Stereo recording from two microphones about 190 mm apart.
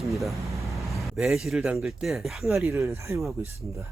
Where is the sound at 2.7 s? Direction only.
15° right (ahead or behind).